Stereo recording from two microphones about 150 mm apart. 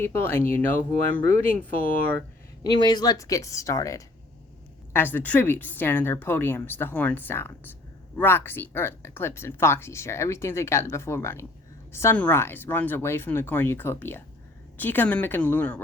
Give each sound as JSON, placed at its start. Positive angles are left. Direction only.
{"t": 0.0, "sound": "speech", "side_deg": 15}
{"t": 2.6, "sound": "speech", "side_deg": 30}